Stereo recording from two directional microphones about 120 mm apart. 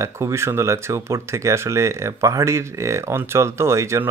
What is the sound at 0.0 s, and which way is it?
Speech, 25° right (ahead or behind).